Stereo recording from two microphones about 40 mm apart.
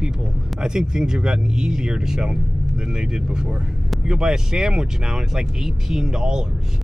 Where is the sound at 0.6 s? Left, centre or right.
Centre.